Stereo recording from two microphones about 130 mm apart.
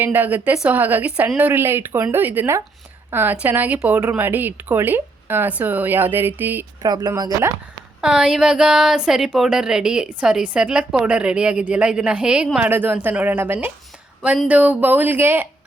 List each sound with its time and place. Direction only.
0.0 s a woman's voice: 15° right (ahead or behind)
6.8 s speech: 30° right (ahead or behind)
8.0 s a woman's voice: 5° right (ahead or behind)